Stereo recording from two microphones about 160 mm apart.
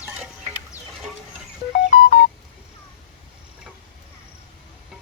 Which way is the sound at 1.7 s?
50° left (ahead or behind).